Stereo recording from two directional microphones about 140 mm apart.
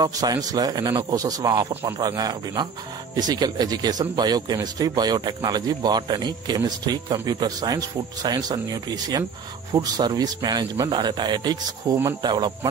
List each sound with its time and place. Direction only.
0.0 s a man's voice: 25° right (ahead or behind)